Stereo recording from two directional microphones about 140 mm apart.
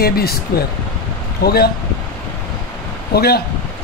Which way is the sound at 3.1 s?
90° left.